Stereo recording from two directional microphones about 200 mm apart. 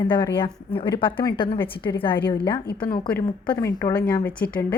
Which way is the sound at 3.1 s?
5° left (ahead or behind).